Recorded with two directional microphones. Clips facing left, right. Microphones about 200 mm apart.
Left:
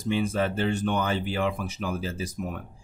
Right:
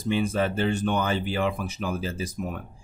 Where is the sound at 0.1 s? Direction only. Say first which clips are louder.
Right 1 dB; 15° right (ahead or behind).